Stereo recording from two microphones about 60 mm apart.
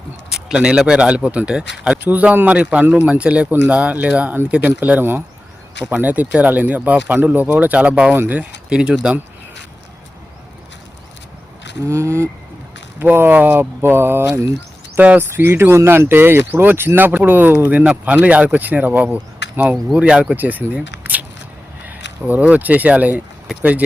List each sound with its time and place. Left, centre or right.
0.3 s speech: centre
2.0 s speech: right
11.9 s speech: right
13.0 s speech: right
14.9 s speech: right
20.3 s speech: right
21.8 s speech: right